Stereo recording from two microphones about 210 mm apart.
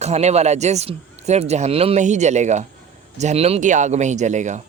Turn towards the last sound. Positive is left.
turn(degrees=-35)  # may be behind; listen again after turning